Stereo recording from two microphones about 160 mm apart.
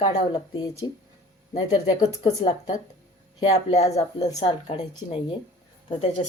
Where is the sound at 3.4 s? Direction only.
40° left (ahead or behind).